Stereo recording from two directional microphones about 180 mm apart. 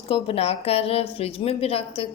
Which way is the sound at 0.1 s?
30° left (ahead or behind).